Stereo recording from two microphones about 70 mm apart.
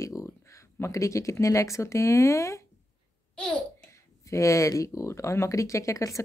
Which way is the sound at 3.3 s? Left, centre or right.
Centre.